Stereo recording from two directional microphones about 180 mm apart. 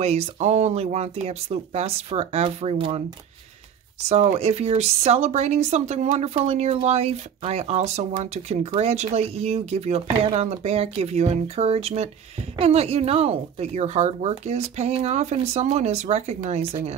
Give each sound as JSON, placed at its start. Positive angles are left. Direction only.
{"t": 0.0, "sound": "speech", "side_deg": -35}
{"t": 4.1, "sound": "speech", "side_deg": -35}